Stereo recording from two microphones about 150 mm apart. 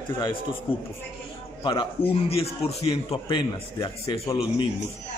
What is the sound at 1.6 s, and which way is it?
A man's voice, 30° left (ahead or behind).